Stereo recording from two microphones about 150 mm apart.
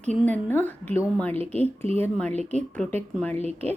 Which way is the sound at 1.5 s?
40° right (ahead or behind).